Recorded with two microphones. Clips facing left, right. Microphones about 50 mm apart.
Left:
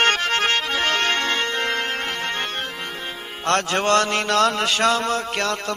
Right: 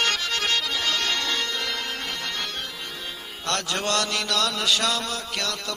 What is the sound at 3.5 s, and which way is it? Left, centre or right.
A man's voice, left.